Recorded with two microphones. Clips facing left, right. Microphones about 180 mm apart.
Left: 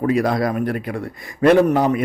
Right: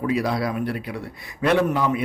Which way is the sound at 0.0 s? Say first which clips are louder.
Left 5 dB; 45° left (ahead or behind).